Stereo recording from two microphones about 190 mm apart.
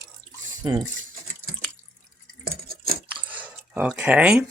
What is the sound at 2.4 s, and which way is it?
Stir, 50° right (ahead or behind).